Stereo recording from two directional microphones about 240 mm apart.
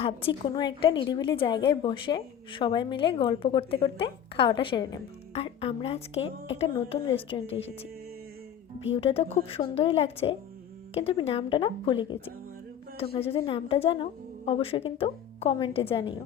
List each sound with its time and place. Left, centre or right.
0.0 s a woman's voice: left
6.1 s speech: left
6.6 s a woman's voice: left
8.9 s a woman's voice: left